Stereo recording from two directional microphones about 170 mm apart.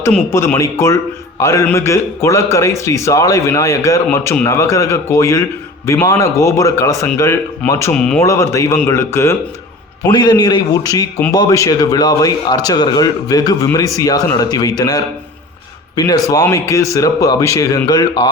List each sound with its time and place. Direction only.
0.0 s a man's voice: 15° left (ahead or behind)
7.9 s speech: 5° left (ahead or behind)
8.2 s a man's voice: 20° left (ahead or behind)